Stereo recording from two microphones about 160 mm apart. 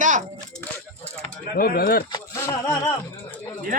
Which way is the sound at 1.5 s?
65° left (ahead or behind).